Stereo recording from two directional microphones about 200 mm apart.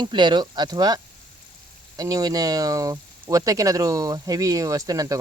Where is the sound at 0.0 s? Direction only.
20° right (ahead or behind).